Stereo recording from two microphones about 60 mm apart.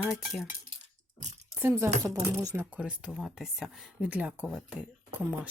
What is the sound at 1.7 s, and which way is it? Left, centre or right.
Speech, right.